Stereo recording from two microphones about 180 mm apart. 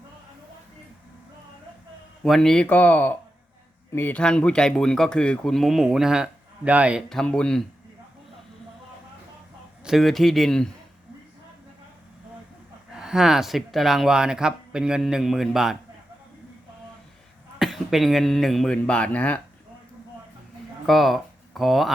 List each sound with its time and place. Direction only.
2.2 s speech: centre (ahead or behind)
9.8 s speech: centre (ahead or behind)
12.9 s speech: 5° right (ahead or behind)
17.6 s speech: centre (ahead or behind)
20.8 s speech: centre (ahead or behind)